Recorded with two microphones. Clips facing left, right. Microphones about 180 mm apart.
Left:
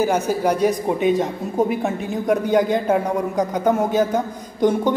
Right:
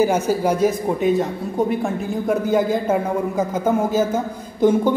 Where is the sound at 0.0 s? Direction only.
10° right (ahead or behind).